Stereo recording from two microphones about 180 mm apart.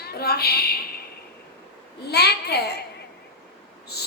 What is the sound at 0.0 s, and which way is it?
Speech, 60° left (ahead or behind).